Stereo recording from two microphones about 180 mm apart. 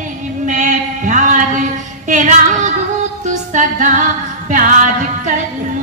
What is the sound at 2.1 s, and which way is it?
Female singing, 45° right (ahead or behind).